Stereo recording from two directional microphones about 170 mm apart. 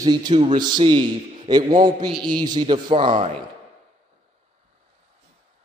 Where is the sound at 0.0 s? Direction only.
25° right (ahead or behind).